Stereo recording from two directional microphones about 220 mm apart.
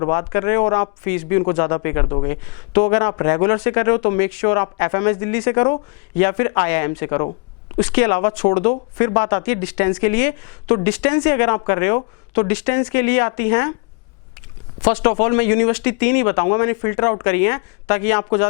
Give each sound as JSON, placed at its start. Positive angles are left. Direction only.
{"t": 0.0, "sound": "a man's voice", "side_deg": 25}
{"t": 15.0, "sound": "speech", "side_deg": 20}